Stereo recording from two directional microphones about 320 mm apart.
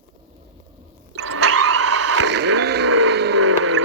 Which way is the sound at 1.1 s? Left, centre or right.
Right.